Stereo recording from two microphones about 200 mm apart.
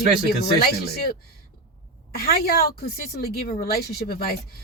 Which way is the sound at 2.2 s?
50° left (ahead or behind).